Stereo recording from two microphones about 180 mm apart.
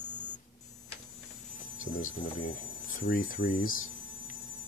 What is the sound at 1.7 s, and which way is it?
Speech, 45° left (ahead or behind).